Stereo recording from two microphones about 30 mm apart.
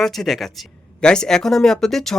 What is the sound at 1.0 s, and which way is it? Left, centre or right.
Speech, left.